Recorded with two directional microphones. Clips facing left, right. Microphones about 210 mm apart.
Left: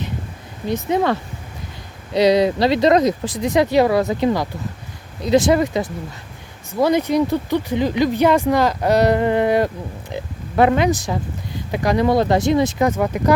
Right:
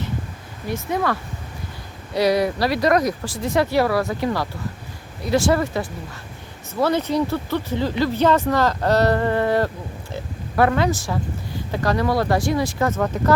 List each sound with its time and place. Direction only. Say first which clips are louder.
0.7 s speech: left 4 dB; 20° left (ahead or behind)